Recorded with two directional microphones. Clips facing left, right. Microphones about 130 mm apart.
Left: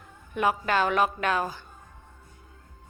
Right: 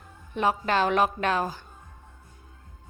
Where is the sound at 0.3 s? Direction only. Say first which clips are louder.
Even; 30° right (ahead or behind).